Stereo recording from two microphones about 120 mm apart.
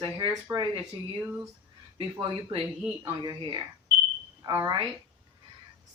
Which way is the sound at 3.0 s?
35° right (ahead or behind).